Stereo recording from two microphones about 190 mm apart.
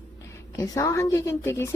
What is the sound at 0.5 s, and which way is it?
A woman's voice, 15° left (ahead or behind).